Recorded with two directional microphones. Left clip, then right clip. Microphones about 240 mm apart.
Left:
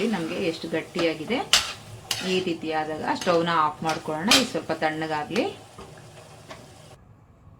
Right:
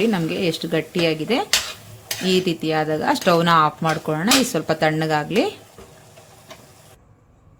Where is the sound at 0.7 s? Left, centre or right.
Right.